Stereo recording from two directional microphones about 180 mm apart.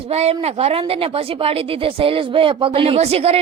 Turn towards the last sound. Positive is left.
turn(degrees=-35)  # may be behind; listen again after turning